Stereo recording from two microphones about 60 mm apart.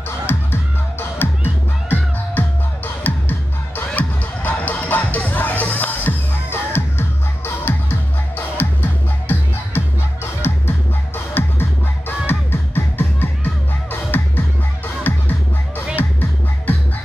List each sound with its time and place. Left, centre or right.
0.3 s music: left
2.4 s music: left